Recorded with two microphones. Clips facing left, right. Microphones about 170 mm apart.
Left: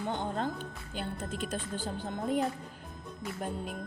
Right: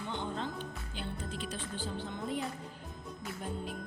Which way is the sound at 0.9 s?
45° left (ahead or behind).